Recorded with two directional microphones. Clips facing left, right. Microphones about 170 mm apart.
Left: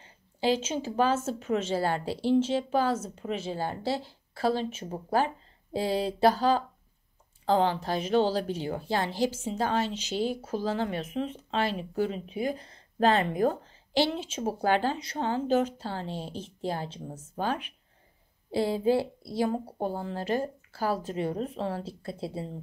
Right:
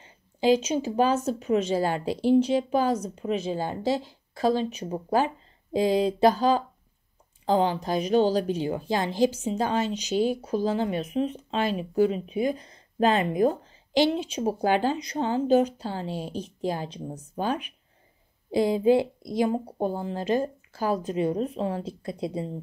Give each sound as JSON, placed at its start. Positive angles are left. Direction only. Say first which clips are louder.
{"t": 0.4, "sound": "a woman's voice", "louder": "right 5 dB", "side_deg": -15}